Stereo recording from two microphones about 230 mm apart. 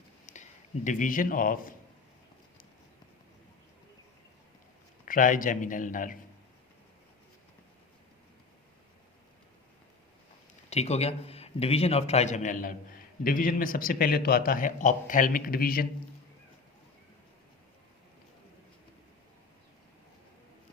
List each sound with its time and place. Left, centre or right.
0.3 s a sound: left
0.9 s a man's voice: left
5.0 s a man's voice: left
10.7 s a man's voice: left